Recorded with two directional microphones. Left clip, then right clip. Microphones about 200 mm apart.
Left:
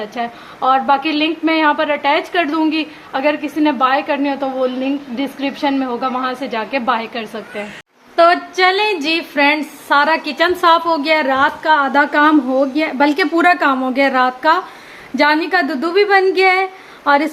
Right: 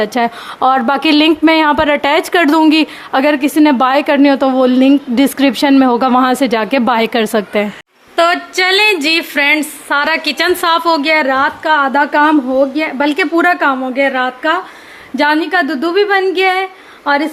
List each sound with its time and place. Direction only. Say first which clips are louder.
0.0 s a woman's voice: right 9 dB; 60° right (ahead or behind)
8.1 s a woman's voice: even; 15° right (ahead or behind)
13.9 s speech: even; 5° left (ahead or behind)
15.1 s a woman's voice: right 2 dB; 10° right (ahead or behind)